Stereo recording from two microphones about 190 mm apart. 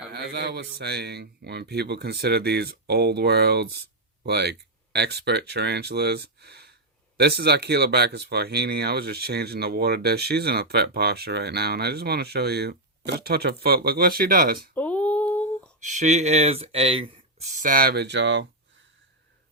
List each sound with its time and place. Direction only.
0.1 s speech: 60° right (ahead or behind)
14.8 s female singing: 10° left (ahead or behind)
15.8 s speech: 40° right (ahead or behind); by 18.4 s 70° right (ahead or behind)